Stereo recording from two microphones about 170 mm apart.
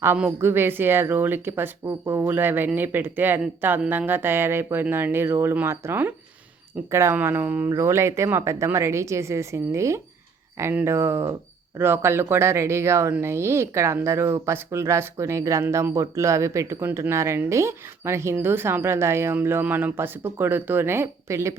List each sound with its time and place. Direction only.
0.0 s speech: 10° right (ahead or behind)